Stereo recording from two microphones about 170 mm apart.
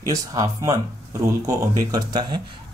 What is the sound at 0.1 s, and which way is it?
Speech, 20° right (ahead or behind).